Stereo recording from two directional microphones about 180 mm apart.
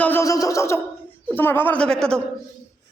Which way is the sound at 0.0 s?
15° left (ahead or behind).